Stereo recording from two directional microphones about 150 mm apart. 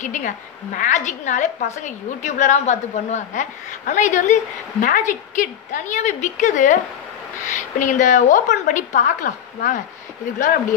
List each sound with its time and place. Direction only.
0.0 s a woman's voice: 55° left (ahead or behind)